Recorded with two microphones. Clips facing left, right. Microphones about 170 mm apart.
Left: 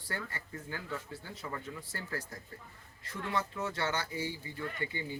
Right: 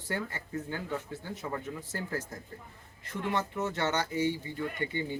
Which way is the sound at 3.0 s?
20° right (ahead or behind).